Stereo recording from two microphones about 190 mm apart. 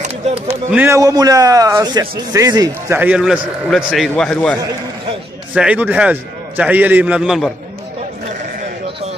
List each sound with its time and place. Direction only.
0.3 s a man's voice: 5° right (ahead or behind)
5.5 s a man's voice: 5° right (ahead or behind)